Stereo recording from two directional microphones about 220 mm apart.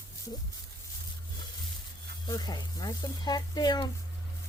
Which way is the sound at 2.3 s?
20° left (ahead or behind).